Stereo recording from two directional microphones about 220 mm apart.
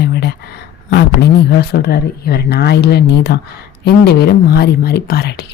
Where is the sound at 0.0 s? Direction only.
50° left (ahead or behind).